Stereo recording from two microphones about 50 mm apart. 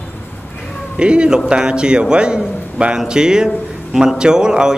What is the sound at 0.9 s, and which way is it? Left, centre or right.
A man's voice, centre.